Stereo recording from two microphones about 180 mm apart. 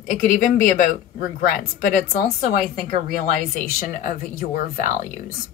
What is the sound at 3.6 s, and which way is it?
Speech, 55° left (ahead or behind).